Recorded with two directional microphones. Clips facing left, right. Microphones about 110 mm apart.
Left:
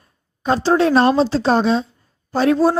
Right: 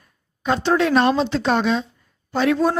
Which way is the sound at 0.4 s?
35° left (ahead or behind).